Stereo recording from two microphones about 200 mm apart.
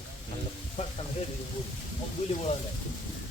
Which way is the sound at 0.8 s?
30° left (ahead or behind).